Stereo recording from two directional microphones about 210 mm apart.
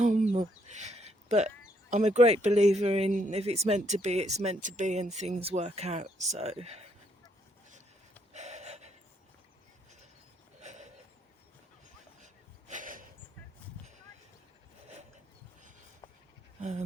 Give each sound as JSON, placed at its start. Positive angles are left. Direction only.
{"t": 0.0, "sound": "speech", "side_deg": -35}
{"t": 8.3, "sound": "gasp", "side_deg": -35}
{"t": 10.6, "sound": "a sound", "side_deg": -35}
{"t": 12.2, "sound": "snort", "side_deg": -35}
{"t": 16.6, "sound": "dog", "side_deg": -30}